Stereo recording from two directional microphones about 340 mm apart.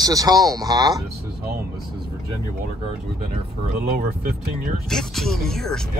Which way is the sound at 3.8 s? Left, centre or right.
Right.